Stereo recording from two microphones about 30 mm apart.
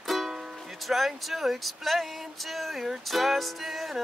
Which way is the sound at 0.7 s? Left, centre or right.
Centre.